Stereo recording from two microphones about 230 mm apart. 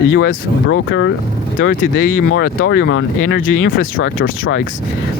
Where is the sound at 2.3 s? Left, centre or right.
Left.